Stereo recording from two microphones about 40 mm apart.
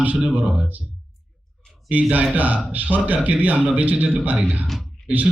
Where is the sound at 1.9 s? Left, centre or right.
Right.